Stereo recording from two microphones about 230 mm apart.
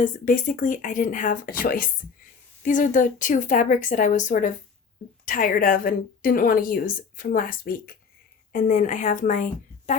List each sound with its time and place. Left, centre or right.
0.0 s a woman's voice: left